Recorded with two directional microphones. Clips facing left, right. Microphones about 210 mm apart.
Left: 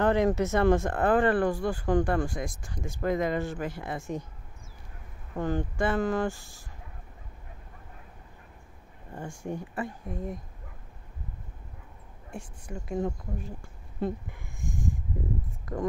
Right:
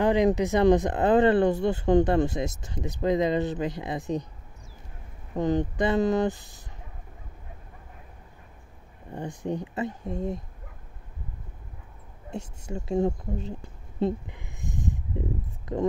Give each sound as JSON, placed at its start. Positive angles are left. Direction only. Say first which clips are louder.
{"t": 0.0, "sound": "speech", "louder": "right 2 dB", "side_deg": -15}
{"t": 5.3, "sound": "speech", "louder": "right 5 dB", "side_deg": -20}
{"t": 9.1, "sound": "speech", "louder": "right 4 dB", "side_deg": -20}
{"t": 12.3, "sound": "a woman's voice", "louder": "right 5 dB", "side_deg": -25}